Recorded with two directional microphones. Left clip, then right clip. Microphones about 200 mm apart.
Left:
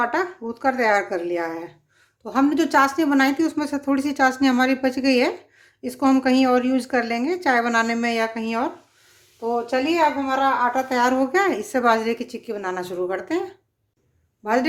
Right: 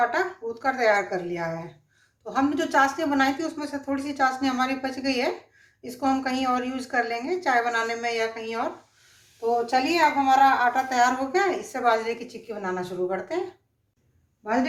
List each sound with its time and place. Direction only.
0.0 s a woman's voice: 40° left (ahead or behind)
9.4 s a woman's voice: 20° left (ahead or behind); by 13.4 s 55° left (ahead or behind)
14.4 s speech: 55° left (ahead or behind)